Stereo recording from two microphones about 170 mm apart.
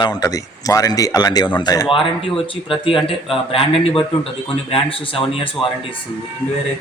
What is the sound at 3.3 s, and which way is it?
Speech, 35° left (ahead or behind).